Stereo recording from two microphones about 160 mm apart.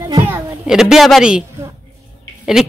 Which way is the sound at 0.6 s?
5° right (ahead or behind).